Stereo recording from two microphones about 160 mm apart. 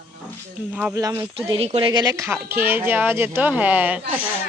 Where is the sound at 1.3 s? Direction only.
35° right (ahead or behind); by 4.0 s 10° right (ahead or behind).